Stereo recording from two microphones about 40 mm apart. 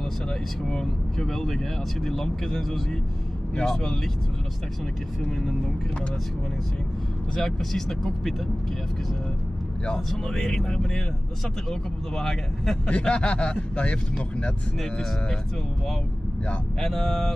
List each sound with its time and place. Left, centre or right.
0.7 s speech: centre
7.3 s speech: centre
9.9 s speech: centre
12.2 s speech: centre
12.9 s speech: left
16.8 s speech: centre